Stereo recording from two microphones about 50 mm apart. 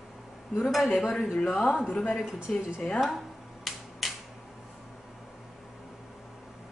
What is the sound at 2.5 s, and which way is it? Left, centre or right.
Speech, left.